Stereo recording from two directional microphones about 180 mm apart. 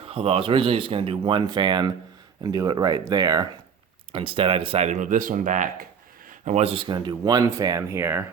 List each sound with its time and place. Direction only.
0.0 s speech: 30° right (ahead or behind); by 8.2 s 15° right (ahead or behind)